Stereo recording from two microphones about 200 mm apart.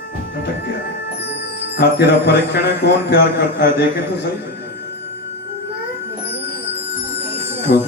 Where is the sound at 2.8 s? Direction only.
55° left (ahead or behind).